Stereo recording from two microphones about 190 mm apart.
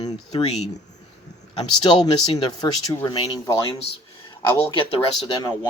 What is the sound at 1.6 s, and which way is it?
Speech, 25° left (ahead or behind).